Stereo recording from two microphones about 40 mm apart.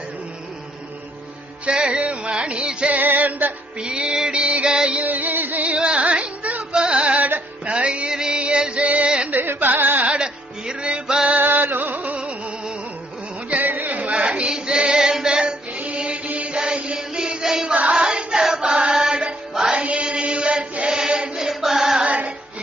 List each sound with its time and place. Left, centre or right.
1.6 s music: right
3.0 s music: right
3.8 s music: right
5.0 s music: right
5.6 s music: right
9.3 s carnatic music: right
10.1 s music: right
11.3 s music: right
12.1 s music: centre
13.5 s carnatic music: right
14.0 s female singing: right
16.0 s music: right
19.7 s chant: right; by 22.0 s centre
22.0 s music: right